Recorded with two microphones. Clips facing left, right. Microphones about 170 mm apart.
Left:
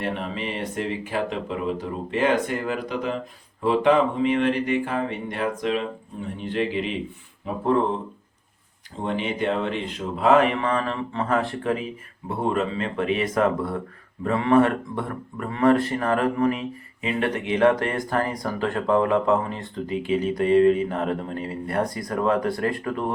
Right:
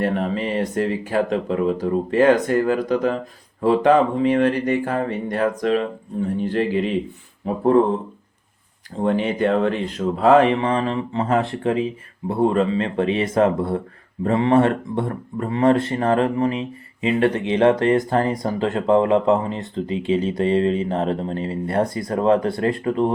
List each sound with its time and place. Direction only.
0.0 s speech: 40° right (ahead or behind)
9.0 s speech: 45° right (ahead or behind)
10.6 s speech: 25° right (ahead or behind)